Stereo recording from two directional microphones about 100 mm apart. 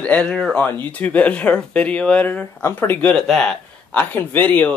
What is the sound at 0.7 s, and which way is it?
Speech, 15° left (ahead or behind).